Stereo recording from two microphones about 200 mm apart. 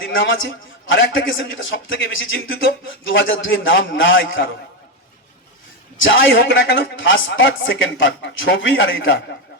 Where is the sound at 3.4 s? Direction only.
70° left (ahead or behind).